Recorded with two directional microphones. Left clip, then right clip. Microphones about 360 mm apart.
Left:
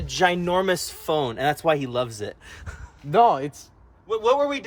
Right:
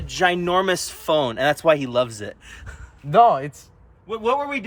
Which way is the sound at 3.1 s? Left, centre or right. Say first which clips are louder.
Right 3 dB; centre.